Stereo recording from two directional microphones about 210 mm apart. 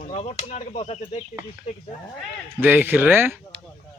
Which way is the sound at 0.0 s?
30° left (ahead or behind).